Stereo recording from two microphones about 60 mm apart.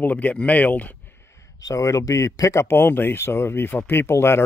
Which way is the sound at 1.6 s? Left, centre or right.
Left.